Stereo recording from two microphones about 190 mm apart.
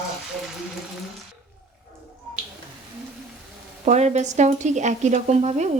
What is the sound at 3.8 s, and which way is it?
A woman's voice, 35° right (ahead or behind).